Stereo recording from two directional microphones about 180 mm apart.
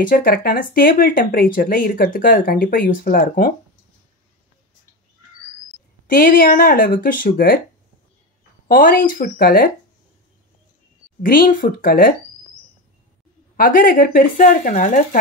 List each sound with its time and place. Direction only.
0.1 s speech: 55° left (ahead or behind)
6.0 s speech: 50° left (ahead or behind)
8.6 s speech: 50° left (ahead or behind)
11.2 s speech: 50° left (ahead or behind)
13.6 s speech: 50° left (ahead or behind)